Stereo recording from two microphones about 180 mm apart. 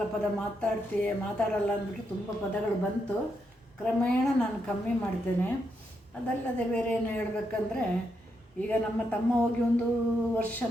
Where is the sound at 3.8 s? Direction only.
5° left (ahead or behind).